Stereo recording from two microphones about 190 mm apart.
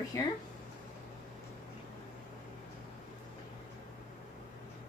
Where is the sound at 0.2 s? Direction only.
15° left (ahead or behind).